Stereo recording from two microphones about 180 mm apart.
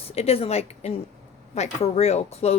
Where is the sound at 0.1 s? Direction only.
35° left (ahead or behind).